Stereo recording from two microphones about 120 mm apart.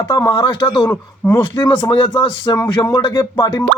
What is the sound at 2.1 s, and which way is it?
Speech, 40° left (ahead or behind).